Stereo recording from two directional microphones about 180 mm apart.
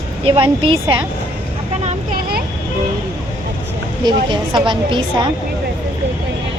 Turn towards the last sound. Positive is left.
turn(degrees=-25)  # may be behind; listen again after turning